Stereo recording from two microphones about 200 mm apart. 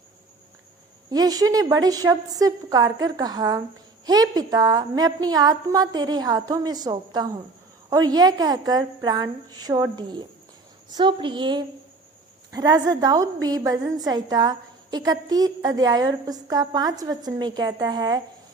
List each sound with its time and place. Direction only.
1.1 s a woman's voice: 20° right (ahead or behind)